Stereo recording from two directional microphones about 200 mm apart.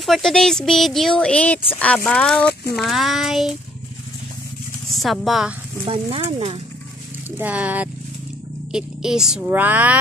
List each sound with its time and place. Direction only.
0.0 s speech: centre (ahead or behind)
4.9 s speech: centre (ahead or behind)
5.9 s speech: 30° right (ahead or behind)
7.2 s speech: 10° right (ahead or behind)